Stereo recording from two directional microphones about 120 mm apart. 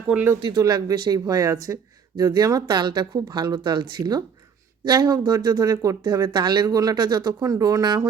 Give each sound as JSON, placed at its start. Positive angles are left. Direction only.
{"t": 0.1, "sound": "speech", "side_deg": -5}
{"t": 0.5, "sound": "speech", "side_deg": -35}